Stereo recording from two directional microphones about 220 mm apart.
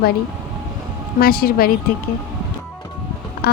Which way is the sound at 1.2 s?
45° left (ahead or behind).